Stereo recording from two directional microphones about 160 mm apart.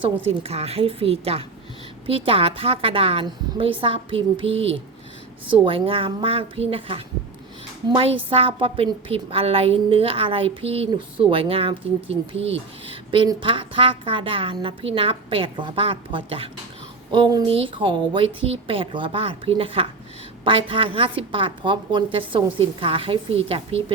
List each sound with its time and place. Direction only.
0.3 s a woman's voice: 40° right (ahead or behind)